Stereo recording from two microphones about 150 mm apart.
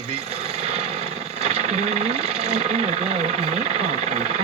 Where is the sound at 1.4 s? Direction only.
45° right (ahead or behind).